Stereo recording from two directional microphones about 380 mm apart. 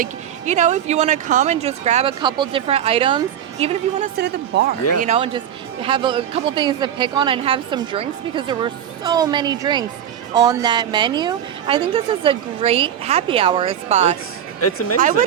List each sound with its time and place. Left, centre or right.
0.0 s speech: centre